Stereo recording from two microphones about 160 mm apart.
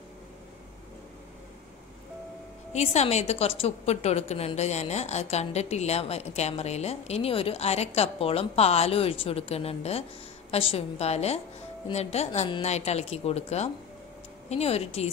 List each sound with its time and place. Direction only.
2.7 s a woman's voice: 45° left (ahead or behind)
12.6 s a woman's voice: 45° left (ahead or behind)